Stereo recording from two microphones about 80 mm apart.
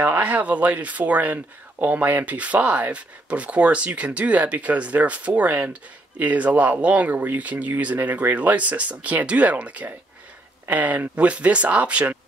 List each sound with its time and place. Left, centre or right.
0.0 s speech: right